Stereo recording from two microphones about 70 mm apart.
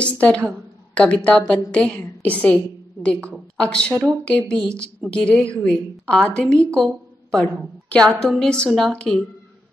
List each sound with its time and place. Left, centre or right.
0.0 s a woman's voice: centre
8.9 s a woman's voice: centre